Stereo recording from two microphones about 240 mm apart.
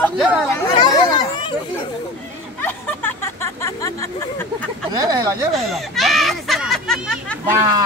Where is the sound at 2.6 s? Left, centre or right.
Centre.